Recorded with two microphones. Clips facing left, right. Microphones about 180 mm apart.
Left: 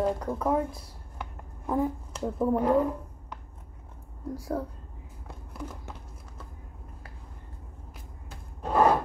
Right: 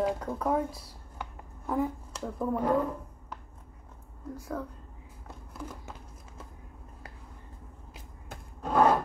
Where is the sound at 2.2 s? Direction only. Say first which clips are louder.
Left 5 dB; 20° left (ahead or behind).